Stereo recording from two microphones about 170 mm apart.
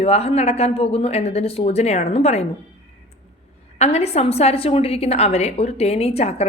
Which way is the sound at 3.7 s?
40° left (ahead or behind).